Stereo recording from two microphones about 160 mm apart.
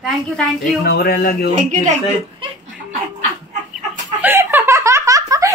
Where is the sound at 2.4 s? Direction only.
35° right (ahead or behind).